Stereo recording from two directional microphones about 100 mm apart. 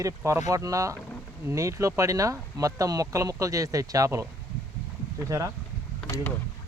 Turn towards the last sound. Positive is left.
turn(degrees=20)  # may be behind; listen again after turning